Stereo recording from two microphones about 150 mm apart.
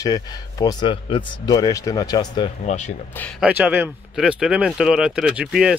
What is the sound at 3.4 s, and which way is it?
Speech, 10° right (ahead or behind).